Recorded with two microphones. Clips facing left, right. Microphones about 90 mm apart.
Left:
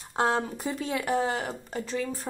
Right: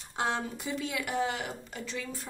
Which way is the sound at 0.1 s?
40° left (ahead or behind).